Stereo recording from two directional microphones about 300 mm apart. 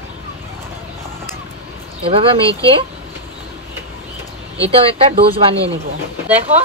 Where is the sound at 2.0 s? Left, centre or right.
Centre.